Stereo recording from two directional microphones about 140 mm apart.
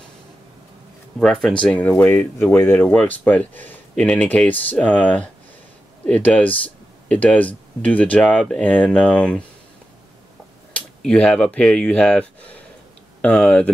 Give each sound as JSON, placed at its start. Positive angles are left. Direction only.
{"t": 1.2, "sound": "speech", "side_deg": 0}
{"t": 11.1, "sound": "speech", "side_deg": 5}